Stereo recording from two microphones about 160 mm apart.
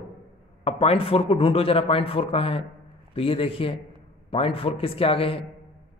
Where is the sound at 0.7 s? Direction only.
35° left (ahead or behind).